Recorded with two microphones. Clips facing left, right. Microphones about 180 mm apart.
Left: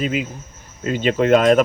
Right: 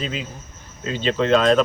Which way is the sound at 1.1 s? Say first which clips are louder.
Left 3 dB; 50° left (ahead or behind).